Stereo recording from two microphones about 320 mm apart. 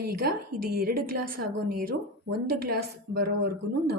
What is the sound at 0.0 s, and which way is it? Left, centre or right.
A woman's voice, right.